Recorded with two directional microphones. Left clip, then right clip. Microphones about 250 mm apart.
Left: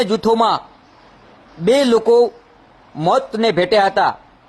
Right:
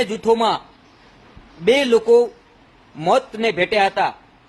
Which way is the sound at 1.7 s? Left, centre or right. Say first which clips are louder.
Left 1 dB; centre.